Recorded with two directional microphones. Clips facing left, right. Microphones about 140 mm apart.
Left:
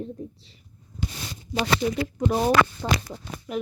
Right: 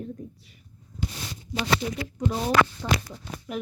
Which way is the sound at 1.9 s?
65° left (ahead or behind).